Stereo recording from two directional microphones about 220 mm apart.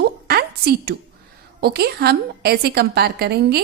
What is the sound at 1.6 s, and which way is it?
A woman's voice, 45° right (ahead or behind).